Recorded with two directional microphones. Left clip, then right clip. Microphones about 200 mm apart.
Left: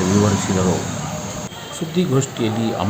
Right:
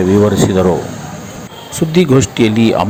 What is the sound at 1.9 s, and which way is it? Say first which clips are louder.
Speech: right 10 dB; 30° right (ahead or behind).